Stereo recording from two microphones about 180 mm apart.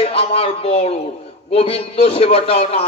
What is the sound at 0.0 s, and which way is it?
A man's voice, 30° left (ahead or behind).